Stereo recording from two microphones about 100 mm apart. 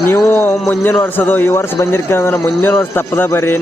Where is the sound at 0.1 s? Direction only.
20° left (ahead or behind).